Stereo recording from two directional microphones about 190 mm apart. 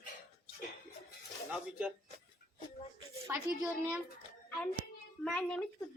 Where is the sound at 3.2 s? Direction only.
15° right (ahead or behind).